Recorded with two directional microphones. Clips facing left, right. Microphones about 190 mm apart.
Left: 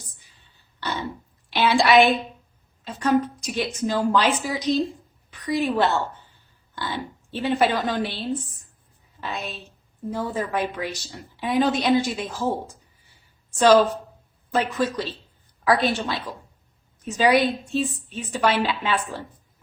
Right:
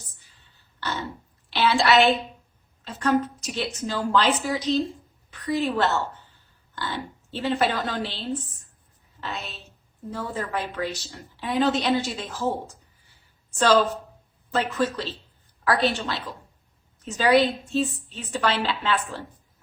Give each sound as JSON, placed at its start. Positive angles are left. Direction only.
{"t": 1.5, "sound": "a sound", "side_deg": 15}
{"t": 2.8, "sound": "a woman's voice", "side_deg": 15}
{"t": 9.2, "sound": "a woman's voice", "side_deg": 15}